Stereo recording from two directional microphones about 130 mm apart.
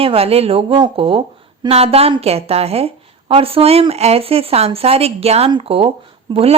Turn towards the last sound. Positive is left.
turn(degrees=-50)  # may be behind; listen again after turning